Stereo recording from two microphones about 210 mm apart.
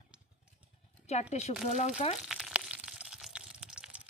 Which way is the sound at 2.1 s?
Centre (ahead or behind).